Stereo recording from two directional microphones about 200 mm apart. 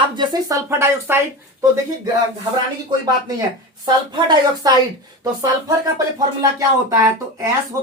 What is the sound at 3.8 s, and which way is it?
Speech, 20° right (ahead or behind).